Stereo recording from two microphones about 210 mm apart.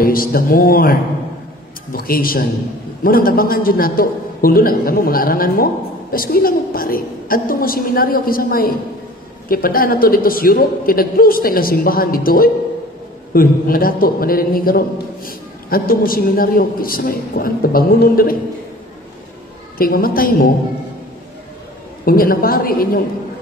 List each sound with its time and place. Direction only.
0.0 s a man's voice: 45° left (ahead or behind)
19.8 s a man's voice: 45° left (ahead or behind)
22.0 s a man's voice: 45° left (ahead or behind)